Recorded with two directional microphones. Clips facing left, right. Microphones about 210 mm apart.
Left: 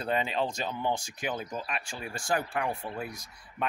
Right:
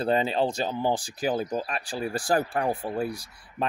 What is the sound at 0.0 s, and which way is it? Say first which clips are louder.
Speech: right 6 dB; 35° right (ahead or behind).